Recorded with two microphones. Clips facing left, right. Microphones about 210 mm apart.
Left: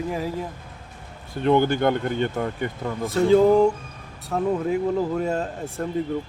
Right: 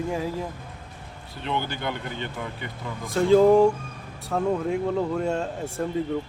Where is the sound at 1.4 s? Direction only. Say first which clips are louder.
Left 10 dB; 50° left (ahead or behind).